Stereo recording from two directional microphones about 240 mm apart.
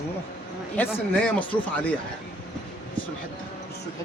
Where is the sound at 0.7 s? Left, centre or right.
Centre.